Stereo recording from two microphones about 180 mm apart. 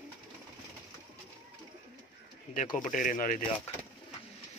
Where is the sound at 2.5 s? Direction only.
45° left (ahead or behind).